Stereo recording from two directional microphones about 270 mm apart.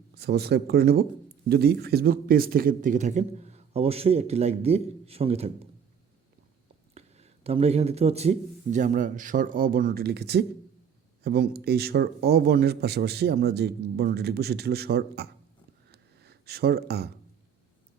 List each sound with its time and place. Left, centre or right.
0.1 s speech: right
6.9 s speech: right
15.9 s a sound: right